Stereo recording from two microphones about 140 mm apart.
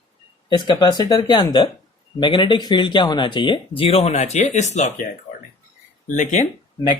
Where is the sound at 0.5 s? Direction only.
30° left (ahead or behind); by 4.9 s 60° left (ahead or behind).